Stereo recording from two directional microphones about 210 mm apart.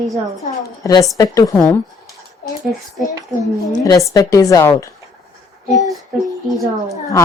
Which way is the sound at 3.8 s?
15° left (ahead or behind).